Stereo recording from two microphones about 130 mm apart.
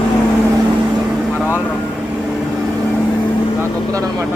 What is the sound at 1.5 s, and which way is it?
Vehicle, 20° left (ahead or behind).